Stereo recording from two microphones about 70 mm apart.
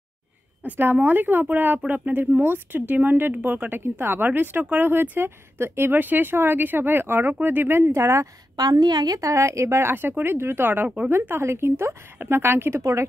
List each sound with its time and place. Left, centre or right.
0.7 s speech: right
8.5 s a woman's voice: right
9.2 s speech: right